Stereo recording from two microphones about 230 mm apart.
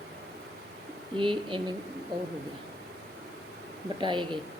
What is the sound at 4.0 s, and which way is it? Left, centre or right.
Speech, centre.